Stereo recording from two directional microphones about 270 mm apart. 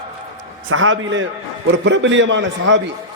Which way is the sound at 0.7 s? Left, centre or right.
Right.